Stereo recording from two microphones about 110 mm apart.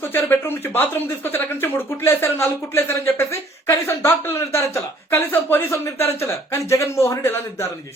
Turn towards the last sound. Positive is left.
turn(degrees=25)  # may be behind; listen again after turning